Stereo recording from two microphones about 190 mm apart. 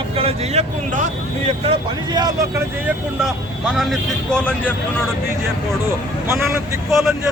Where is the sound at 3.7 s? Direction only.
Centre (ahead or behind).